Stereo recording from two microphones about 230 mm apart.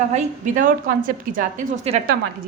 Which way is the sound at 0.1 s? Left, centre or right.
Right.